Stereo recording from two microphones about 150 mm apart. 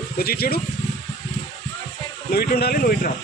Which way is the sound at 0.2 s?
90° left.